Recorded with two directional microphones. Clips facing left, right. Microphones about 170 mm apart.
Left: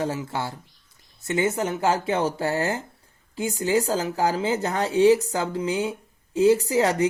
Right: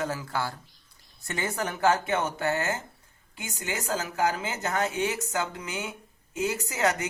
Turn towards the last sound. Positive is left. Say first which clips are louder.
# left 9 dB
turn(degrees=35)  # may be behind; listen again after turning